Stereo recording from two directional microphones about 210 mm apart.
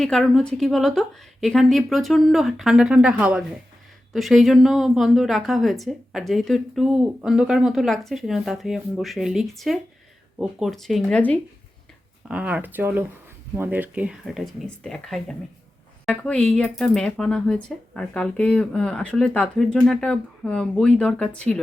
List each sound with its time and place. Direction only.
0.0 s a woman's voice: centre (ahead or behind)
12.3 s a woman's voice: 5° right (ahead or behind)